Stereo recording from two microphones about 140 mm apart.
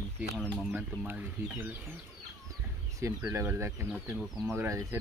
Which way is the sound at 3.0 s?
20° right (ahead or behind).